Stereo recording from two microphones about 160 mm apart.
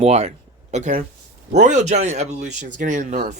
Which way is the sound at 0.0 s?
40° right (ahead or behind).